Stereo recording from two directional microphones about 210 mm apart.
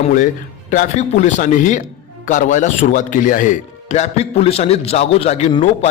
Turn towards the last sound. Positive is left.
turn(degrees=30)  # may be behind; listen again after turning